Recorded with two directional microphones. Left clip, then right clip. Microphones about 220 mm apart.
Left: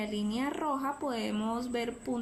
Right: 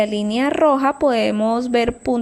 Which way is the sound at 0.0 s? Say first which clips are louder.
Right 15 dB; 35° right (ahead or behind).